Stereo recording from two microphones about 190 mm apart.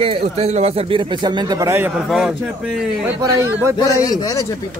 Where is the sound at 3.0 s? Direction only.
15° right (ahead or behind).